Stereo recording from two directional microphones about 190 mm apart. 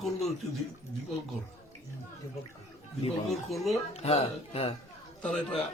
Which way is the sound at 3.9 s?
35° left (ahead or behind).